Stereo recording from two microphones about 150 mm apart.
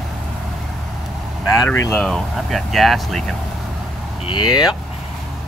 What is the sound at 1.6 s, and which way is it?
Speech, 10° left (ahead or behind).